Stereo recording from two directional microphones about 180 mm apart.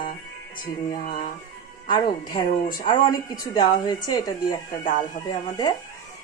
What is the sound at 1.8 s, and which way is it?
Speech, 25° left (ahead or behind).